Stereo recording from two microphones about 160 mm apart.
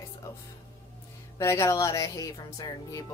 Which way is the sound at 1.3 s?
20° left (ahead or behind).